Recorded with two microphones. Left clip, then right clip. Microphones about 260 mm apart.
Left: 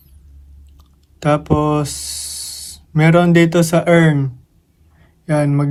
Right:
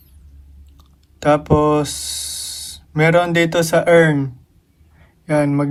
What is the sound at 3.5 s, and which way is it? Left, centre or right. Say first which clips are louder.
Speech: right 1 dB; centre.